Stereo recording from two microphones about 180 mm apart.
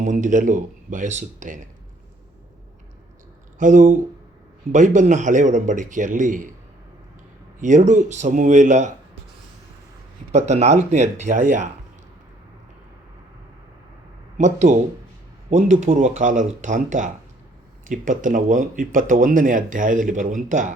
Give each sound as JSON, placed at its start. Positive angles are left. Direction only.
{"t": 0.0, "sound": "speech", "side_deg": -45}
{"t": 3.6, "sound": "speech", "side_deg": -45}
{"t": 7.6, "sound": "speech", "side_deg": -45}
{"t": 10.3, "sound": "speech", "side_deg": -40}
{"t": 14.3, "sound": "speech", "side_deg": -40}